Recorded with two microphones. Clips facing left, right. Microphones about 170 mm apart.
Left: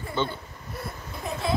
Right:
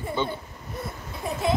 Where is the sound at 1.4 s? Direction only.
20° right (ahead or behind).